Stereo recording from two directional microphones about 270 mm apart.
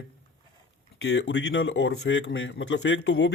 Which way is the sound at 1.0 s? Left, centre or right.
Left.